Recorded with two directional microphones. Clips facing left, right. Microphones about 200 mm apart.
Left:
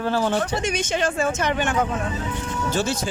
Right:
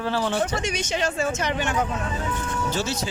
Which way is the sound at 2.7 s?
50° left (ahead or behind).